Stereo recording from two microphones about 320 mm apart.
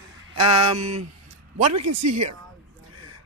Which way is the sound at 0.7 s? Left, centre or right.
Right.